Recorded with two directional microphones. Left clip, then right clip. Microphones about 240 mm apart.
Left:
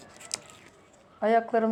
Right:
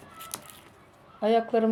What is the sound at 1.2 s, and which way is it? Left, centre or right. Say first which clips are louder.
Speech: even; centre.